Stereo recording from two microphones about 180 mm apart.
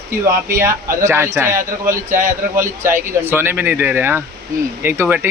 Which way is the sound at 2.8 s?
10° right (ahead or behind).